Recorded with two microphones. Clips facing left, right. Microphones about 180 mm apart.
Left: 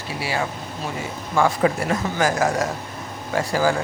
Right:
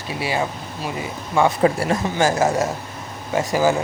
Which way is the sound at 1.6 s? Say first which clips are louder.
Right 2 dB; 30° right (ahead or behind).